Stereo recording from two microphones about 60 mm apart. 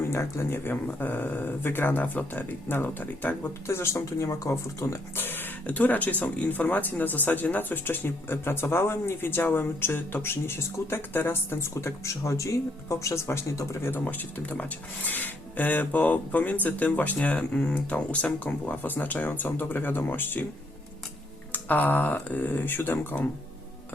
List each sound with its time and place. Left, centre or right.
0.1 s speech: left
5.1 s speech: left
13.9 s speech: left
21.5 s speech: left